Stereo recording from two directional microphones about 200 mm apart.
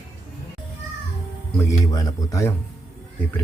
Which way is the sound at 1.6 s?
15° left (ahead or behind).